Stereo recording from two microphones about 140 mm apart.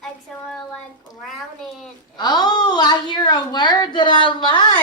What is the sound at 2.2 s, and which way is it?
A woman's voice, 30° left (ahead or behind).